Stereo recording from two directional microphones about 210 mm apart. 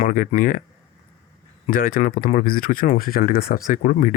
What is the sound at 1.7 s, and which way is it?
Speech, 40° left (ahead or behind).